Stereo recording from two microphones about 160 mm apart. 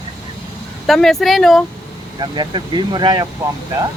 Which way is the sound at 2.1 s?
25° right (ahead or behind).